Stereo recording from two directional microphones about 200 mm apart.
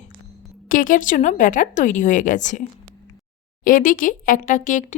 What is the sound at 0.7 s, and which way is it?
Speech, 40° left (ahead or behind).